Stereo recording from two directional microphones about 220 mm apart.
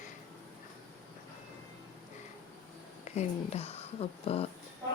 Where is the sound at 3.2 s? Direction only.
30° left (ahead or behind).